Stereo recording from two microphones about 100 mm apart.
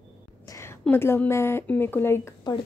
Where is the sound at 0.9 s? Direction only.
20° left (ahead or behind).